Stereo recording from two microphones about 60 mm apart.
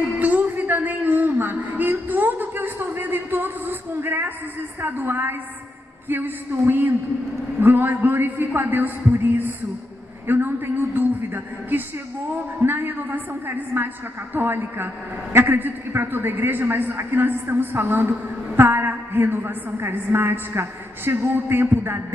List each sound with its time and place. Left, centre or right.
0.2 s a sound: right
4.8 s a woman's voice: right
12.6 s a woman's voice: right